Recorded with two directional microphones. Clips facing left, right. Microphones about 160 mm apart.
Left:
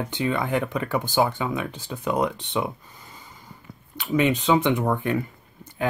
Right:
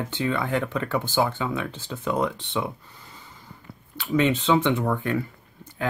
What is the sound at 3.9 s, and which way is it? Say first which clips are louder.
Speech: even; 15° left (ahead or behind).